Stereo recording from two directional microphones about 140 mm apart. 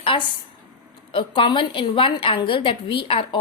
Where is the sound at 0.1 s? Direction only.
35° left (ahead or behind).